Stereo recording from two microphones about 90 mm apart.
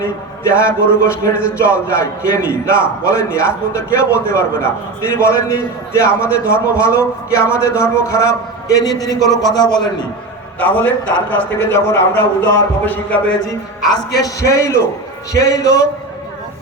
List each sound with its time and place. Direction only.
0.6 s a man's voice: 30° left (ahead or behind); by 10.1 s 50° left (ahead or behind)
10.6 s a man's voice: 20° left (ahead or behind)
13.8 s a man's voice: 45° left (ahead or behind)